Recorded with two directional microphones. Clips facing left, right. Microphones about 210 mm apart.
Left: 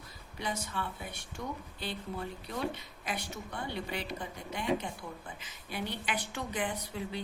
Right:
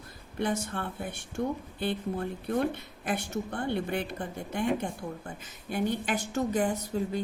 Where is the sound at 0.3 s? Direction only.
50° right (ahead or behind).